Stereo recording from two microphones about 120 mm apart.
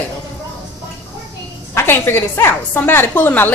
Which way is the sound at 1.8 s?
20° left (ahead or behind).